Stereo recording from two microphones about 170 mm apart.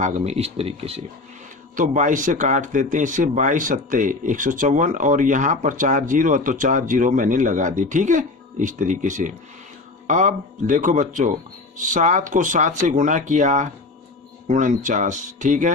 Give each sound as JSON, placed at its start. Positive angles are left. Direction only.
{"t": 0.0, "sound": "speech", "side_deg": -45}
{"t": 1.7, "sound": "speech", "side_deg": -45}